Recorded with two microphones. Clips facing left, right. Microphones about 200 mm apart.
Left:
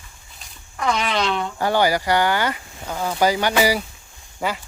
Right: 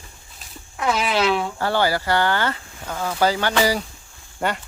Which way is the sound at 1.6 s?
15° left (ahead or behind).